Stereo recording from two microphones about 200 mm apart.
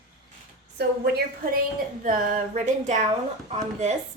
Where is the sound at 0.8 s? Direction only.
55° right (ahead or behind).